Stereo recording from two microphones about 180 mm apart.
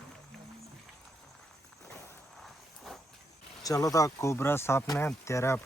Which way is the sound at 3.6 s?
20° left (ahead or behind).